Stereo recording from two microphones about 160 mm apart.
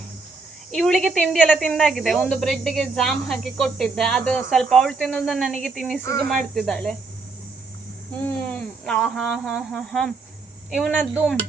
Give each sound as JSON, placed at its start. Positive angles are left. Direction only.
{"t": 0.7, "sound": "speech", "side_deg": 0}
{"t": 6.0, "sound": "speech", "side_deg": 20}
{"t": 6.2, "sound": "speech", "side_deg": 0}
{"t": 8.1, "sound": "speech", "side_deg": 10}